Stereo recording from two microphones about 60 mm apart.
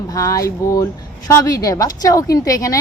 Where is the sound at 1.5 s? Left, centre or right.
Left.